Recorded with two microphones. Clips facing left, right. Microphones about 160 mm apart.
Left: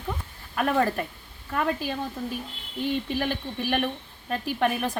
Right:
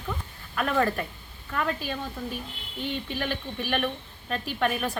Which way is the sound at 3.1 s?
40° left (ahead or behind).